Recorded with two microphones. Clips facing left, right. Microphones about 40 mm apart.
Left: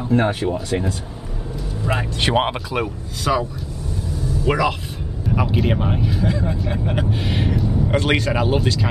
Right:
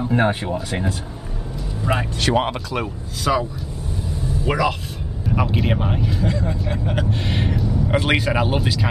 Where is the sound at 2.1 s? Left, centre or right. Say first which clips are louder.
Left 3 dB; left.